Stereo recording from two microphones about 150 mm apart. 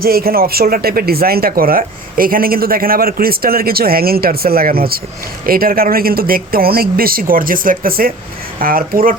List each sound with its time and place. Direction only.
0.0 s speech: 85° right